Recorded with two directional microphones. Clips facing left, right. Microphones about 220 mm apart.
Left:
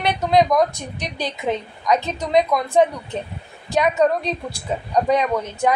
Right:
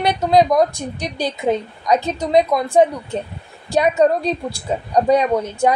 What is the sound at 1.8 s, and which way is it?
A woman's voice, 30° right (ahead or behind).